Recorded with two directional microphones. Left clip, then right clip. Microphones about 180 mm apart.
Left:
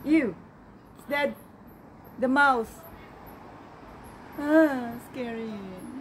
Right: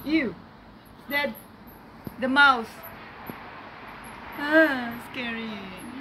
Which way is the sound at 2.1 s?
25° left (ahead or behind).